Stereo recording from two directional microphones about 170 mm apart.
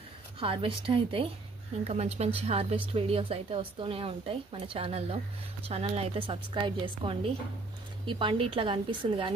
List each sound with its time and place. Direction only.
0.4 s a woman's voice: 30° right (ahead or behind)